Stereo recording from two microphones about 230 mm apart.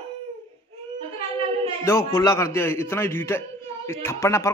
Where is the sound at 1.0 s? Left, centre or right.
Right.